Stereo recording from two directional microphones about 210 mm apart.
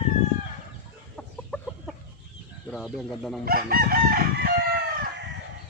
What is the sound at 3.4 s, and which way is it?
Chicken, 45° right (ahead or behind).